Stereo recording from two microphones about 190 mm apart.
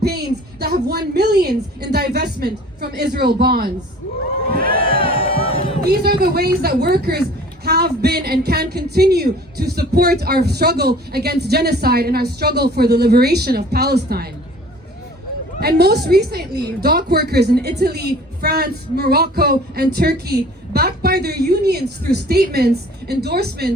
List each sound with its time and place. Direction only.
0.0 s a woman's voice: 55° right (ahead or behind)
4.7 s music: 30° left (ahead or behind)
5.9 s a woman's voice: 55° right (ahead or behind)
15.6 s a woman's voice: 55° right (ahead or behind)